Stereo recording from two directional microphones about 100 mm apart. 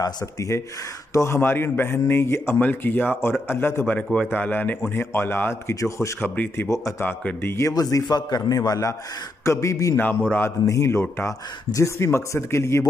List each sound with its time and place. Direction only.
0.0 s a man's voice: 35° left (ahead or behind)
3.8 s a man's voice: 10° left (ahead or behind); by 6.3 s 30° left (ahead or behind)
6.3 s a man's voice: 20° left (ahead or behind)
7.7 s a man's voice: 40° left (ahead or behind)